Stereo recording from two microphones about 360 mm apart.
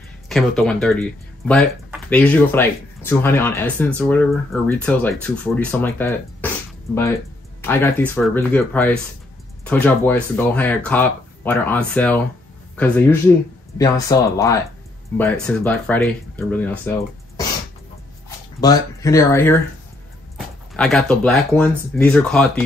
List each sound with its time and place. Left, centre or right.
0.3 s speech: centre
7.6 s speech: centre
18.6 s speech: centre